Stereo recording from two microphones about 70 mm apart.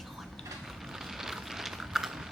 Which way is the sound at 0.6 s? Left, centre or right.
Centre.